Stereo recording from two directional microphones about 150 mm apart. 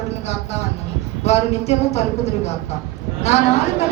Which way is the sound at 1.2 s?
45° left (ahead or behind).